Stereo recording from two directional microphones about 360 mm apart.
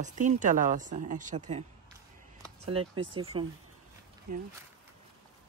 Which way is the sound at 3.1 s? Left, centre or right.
Centre.